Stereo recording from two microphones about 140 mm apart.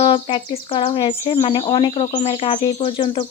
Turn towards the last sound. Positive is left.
turn(degrees=40)  # may be behind; listen again after turning